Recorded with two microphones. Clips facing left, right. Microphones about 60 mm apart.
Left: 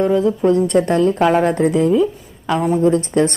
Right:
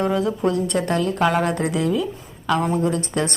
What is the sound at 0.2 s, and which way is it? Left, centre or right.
A woman's voice, left.